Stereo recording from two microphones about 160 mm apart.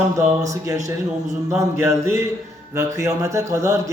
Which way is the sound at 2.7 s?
20° right (ahead or behind).